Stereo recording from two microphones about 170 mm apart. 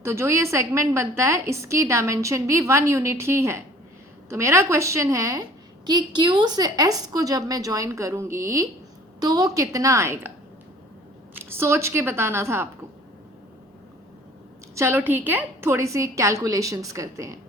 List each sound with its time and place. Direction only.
0.0 s a woman's voice: 15° right (ahead or behind)
11.4 s a woman's voice: 15° right (ahead or behind)
14.8 s a woman's voice: 15° right (ahead or behind)